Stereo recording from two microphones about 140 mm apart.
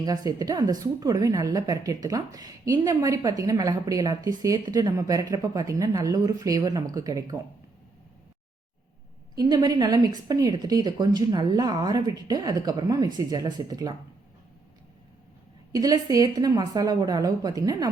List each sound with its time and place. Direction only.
0.0 s a woman's voice: 25° right (ahead or behind)
9.3 s a woman's voice: 30° right (ahead or behind)
15.7 s a woman's voice: 25° right (ahead or behind)